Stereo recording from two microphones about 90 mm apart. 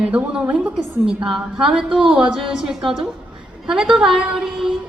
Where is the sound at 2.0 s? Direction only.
70° right (ahead or behind).